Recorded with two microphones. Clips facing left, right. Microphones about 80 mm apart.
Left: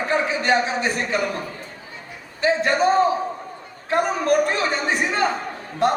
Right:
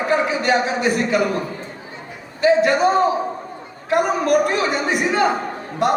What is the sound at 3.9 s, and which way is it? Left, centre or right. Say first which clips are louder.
Speech: right 2 dB; left.